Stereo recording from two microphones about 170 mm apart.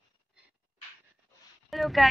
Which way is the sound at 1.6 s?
Centre (ahead or behind).